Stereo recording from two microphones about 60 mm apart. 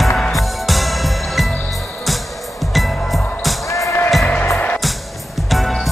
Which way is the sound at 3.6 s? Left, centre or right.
Left.